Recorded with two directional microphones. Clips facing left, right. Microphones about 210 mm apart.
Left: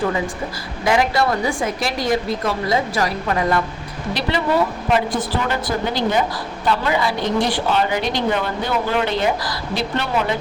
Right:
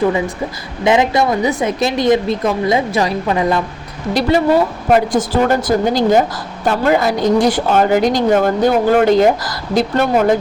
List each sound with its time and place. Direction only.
0.9 s a woman's voice: 20° right (ahead or behind)
4.1 s a woman's voice: 45° right (ahead or behind)